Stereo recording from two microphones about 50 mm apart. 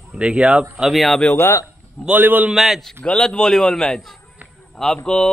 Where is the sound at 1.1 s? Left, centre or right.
Centre.